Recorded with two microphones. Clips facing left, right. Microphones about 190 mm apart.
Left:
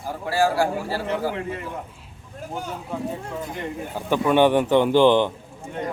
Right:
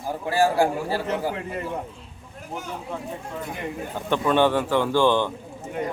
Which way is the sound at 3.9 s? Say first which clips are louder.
Left 2 dB; 10° left (ahead or behind).